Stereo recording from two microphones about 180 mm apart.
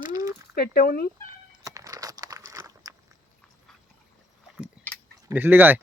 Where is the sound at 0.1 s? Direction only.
20° right (ahead or behind).